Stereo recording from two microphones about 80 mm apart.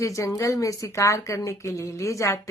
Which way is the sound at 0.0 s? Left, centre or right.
Left.